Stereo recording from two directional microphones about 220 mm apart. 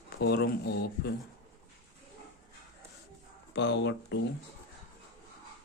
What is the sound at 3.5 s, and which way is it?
Speech, 50° left (ahead or behind).